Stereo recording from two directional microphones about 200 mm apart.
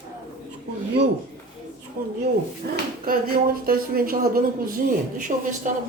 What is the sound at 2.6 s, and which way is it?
Speech, 50° right (ahead or behind).